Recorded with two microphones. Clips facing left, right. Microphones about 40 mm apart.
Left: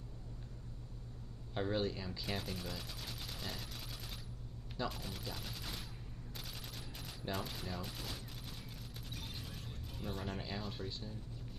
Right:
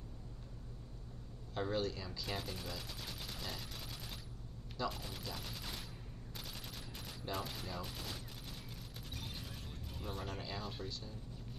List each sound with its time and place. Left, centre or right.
1.5 s speech: centre
2.2 s fusillade: centre
4.8 s speech: centre
7.1 s speech: centre
9.1 s music: centre
10.9 s speech: left